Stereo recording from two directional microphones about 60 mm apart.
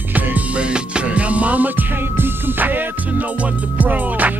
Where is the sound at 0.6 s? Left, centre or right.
Centre.